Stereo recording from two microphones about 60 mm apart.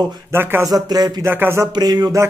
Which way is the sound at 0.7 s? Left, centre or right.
Right.